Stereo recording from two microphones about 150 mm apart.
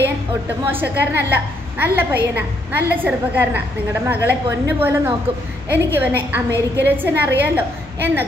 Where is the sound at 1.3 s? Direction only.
15° right (ahead or behind).